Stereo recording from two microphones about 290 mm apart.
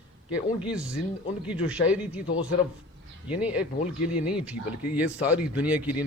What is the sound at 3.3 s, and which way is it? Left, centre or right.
Speech, centre.